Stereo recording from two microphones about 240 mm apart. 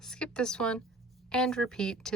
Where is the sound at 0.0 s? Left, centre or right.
Centre.